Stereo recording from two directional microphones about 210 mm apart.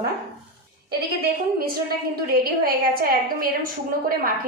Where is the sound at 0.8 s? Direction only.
45° right (ahead or behind).